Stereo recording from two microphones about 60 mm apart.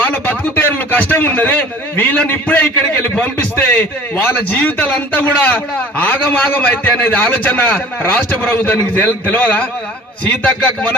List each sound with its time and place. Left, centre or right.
0.0 s a man's voice: left